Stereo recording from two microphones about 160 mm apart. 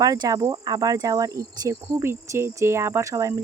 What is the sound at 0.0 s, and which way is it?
Speech, 20° right (ahead or behind).